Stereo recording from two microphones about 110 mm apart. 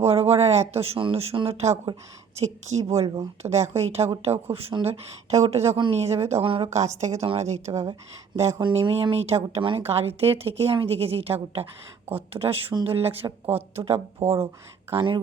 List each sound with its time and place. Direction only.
0.0 s speech: 70° right (ahead or behind)
4.0 s speech: 40° right (ahead or behind)
4.8 s speech: 70° right (ahead or behind)
5.7 s speech: 50° right (ahead or behind)
6.0 s speech: 75° right (ahead or behind); by 6.7 s 55° right (ahead or behind)
6.7 s a woman's voice: 90° right
7.2 s speech: 75° right (ahead or behind)
8.3 s speech: 45° right (ahead or behind)
8.7 s speech: 60° right (ahead or behind)